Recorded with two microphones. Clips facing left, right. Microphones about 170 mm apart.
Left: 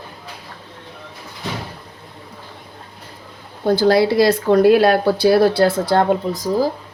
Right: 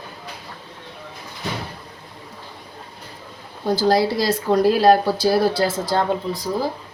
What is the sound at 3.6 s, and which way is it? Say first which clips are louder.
Speech: left 4 dB; 65° left (ahead or behind).